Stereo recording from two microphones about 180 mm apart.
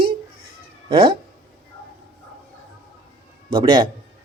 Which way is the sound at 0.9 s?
30° right (ahead or behind).